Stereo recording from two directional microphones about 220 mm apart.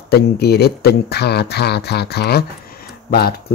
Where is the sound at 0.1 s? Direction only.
45° left (ahead or behind).